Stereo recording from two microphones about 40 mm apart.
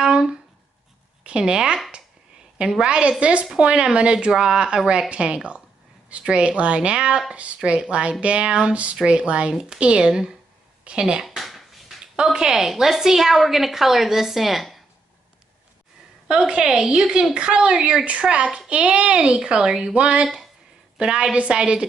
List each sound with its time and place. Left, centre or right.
0.0 s a sound: right
1.2 s speech: right
2.8 s a woman's voice: right
11.2 s a sound: centre
12.2 s a woman's voice: centre
12.4 s a woman's voice: centre
16.3 s a woman's voice: right